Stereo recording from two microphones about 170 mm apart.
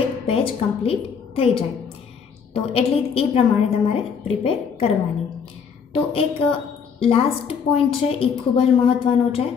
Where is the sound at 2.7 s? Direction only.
35° left (ahead or behind).